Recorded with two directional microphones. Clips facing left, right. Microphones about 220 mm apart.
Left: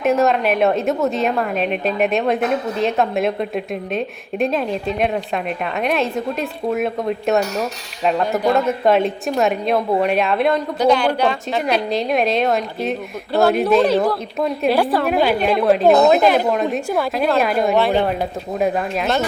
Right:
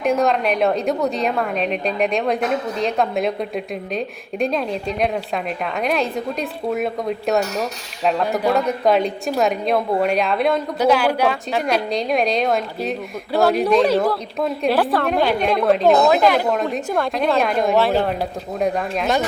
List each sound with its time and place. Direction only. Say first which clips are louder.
0.0 s a woman's voice: left 2 dB; 5° left (ahead or behind)
16.2 s speech: left 1 dB; 20° left (ahead or behind)
16.7 s a woman's voice: left 1 dB; 5° left (ahead or behind)